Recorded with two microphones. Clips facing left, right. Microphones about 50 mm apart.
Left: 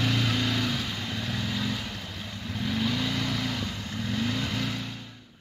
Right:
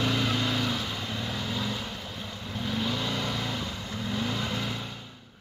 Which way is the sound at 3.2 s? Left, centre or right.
Centre.